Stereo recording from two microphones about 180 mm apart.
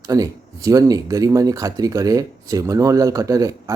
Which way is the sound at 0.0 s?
20° right (ahead or behind).